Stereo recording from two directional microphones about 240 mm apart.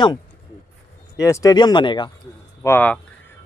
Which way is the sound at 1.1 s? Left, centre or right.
Centre.